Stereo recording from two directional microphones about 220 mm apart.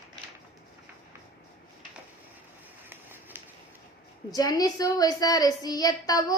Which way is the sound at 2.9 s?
10° right (ahead or behind).